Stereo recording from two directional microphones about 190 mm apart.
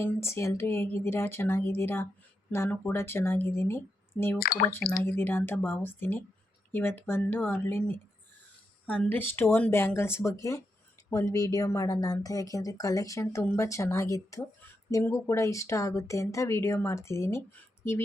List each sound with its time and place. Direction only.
0.0 s speech: 15° left (ahead or behind)
4.4 s speech: 50° left (ahead or behind)
5.0 s speech: 10° left (ahead or behind)